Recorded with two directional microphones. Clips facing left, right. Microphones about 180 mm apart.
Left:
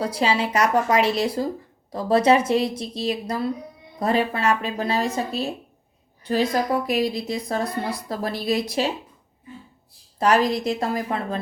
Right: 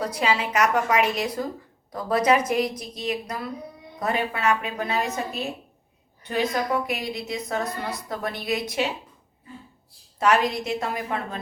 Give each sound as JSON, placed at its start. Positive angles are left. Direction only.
{"t": 0.0, "sound": "a woman's voice", "side_deg": 30}
{"t": 6.8, "sound": "a woman's voice", "side_deg": 35}
{"t": 10.2, "sound": "a woman's voice", "side_deg": 35}